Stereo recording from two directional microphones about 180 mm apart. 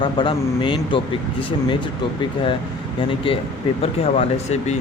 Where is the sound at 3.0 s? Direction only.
30° left (ahead or behind).